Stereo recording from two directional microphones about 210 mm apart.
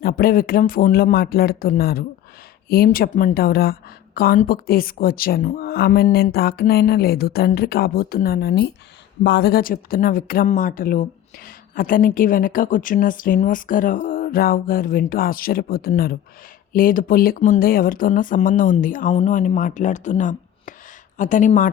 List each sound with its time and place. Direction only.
0.0 s a woman's voice: 45° left (ahead or behind)